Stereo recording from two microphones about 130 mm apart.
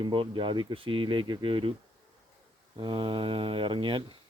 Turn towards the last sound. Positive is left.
turn(degrees=-40)  # may be behind; listen again after turning